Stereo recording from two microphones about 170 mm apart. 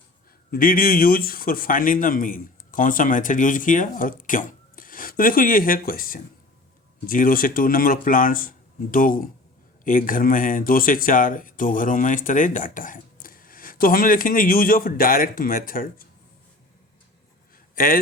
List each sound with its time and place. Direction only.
0.5 s speech: 55° left (ahead or behind)
17.8 s speech: 55° left (ahead or behind)